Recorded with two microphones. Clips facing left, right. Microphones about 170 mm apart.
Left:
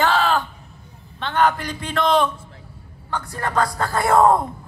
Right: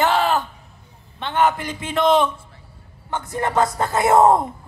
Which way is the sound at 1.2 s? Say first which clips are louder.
Even; 10° right (ahead or behind).